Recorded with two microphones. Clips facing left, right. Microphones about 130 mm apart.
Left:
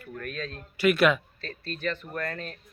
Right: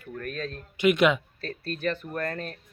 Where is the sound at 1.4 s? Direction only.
50° right (ahead or behind).